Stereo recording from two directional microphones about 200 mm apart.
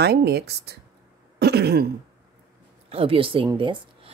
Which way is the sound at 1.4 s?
55° right (ahead or behind).